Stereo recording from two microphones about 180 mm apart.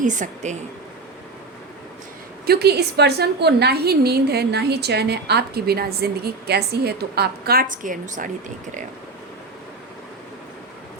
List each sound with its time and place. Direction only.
0.0 s a woman's voice: 45° right (ahead or behind)
2.5 s a woman's voice: 65° right (ahead or behind); by 8.3 s 45° right (ahead or behind)